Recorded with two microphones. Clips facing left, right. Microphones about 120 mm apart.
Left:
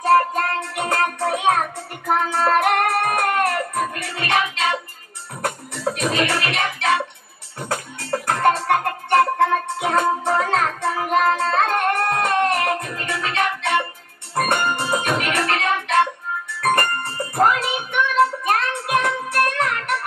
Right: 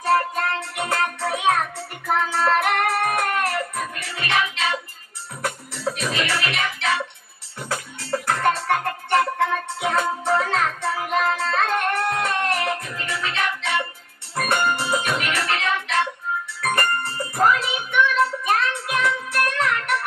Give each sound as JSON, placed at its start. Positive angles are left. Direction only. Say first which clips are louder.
{"t": 0.0, "sound": "music", "louder": "left 4 dB", "side_deg": 45}